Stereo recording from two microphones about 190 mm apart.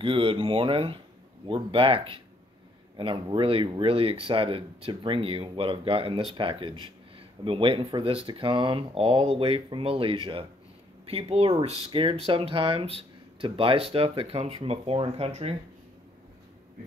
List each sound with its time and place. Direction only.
0.0 s speech: 25° right (ahead or behind)